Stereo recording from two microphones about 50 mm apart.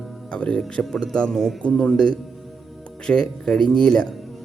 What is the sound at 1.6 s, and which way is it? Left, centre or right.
A man's voice, left.